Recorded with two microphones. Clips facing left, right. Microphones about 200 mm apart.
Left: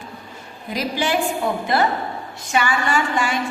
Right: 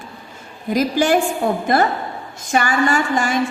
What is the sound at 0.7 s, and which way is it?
A woman's voice, 45° right (ahead or behind).